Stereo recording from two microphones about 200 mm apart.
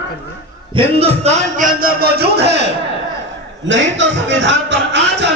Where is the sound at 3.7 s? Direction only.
65° right (ahead or behind).